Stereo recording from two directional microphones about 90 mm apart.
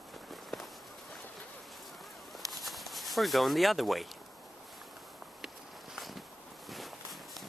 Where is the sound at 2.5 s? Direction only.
Centre (ahead or behind).